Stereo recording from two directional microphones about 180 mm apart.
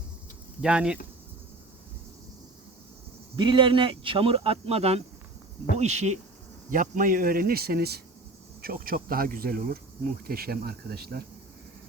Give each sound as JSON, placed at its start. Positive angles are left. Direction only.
{"t": 0.6, "sound": "speech", "side_deg": -5}
{"t": 3.3, "sound": "speech", "side_deg": -25}